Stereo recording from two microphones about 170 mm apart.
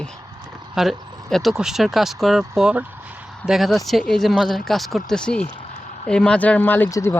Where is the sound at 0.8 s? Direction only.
Centre (ahead or behind).